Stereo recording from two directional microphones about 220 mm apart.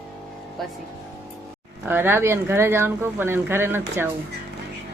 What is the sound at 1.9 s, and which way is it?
A woman's voice, 10° right (ahead or behind).